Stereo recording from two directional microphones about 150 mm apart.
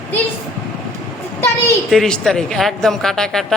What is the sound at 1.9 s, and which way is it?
Speech, 5° left (ahead or behind).